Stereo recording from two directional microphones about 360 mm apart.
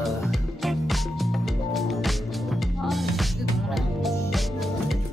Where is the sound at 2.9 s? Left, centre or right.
Centre.